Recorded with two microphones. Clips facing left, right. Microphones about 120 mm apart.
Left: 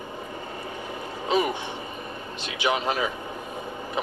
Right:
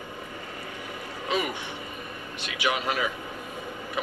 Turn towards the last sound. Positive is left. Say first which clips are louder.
# left 2 dB
turn(degrees=25)  # may be behind; listen again after turning